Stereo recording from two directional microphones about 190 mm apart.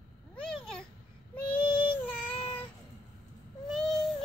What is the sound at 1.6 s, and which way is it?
Child singing, 25° left (ahead or behind).